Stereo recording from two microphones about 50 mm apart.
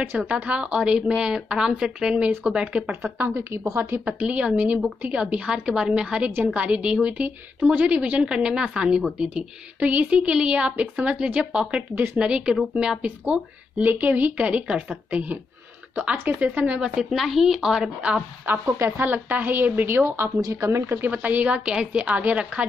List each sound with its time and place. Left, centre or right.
0.3 s a woman's voice: right
3.2 s a woman's voice: right
3.9 s a woman's voice: right; by 9.0 s centre
9.8 s a woman's voice: right
11.9 s speech: right
12.2 s a woman's voice: right
13.0 s a woman's voice: right
16.0 s a woman's voice: right
17.0 s speech: centre
18.4 s speech: right
20.2 s a woman's voice: right
20.8 s speech: right
21.6 s a woman's voice: right